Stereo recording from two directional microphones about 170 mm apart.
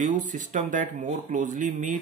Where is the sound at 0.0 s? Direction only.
45° right (ahead or behind).